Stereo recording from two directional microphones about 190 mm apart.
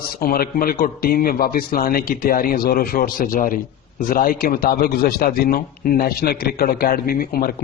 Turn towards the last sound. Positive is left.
turn(degrees=50)  # may be behind; listen again after turning